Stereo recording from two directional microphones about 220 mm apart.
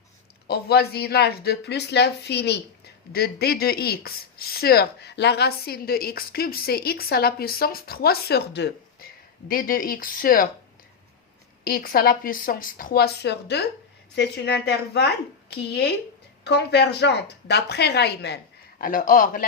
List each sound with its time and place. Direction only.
0.4 s a woman's voice: 45° left (ahead or behind)
11.6 s a woman's voice: 40° left (ahead or behind)
18.8 s a woman's voice: 40° left (ahead or behind)